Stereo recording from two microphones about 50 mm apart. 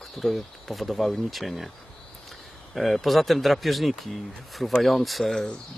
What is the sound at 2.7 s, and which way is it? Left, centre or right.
Speech, centre.